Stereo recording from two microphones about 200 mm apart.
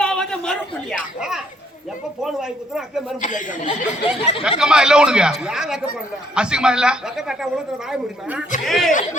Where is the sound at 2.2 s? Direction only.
Centre (ahead or behind).